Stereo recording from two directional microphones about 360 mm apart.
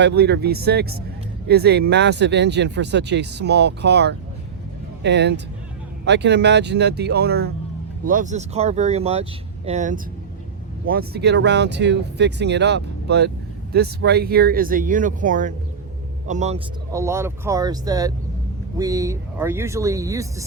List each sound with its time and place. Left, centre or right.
0.0 s speech: right
16.9 s speech: centre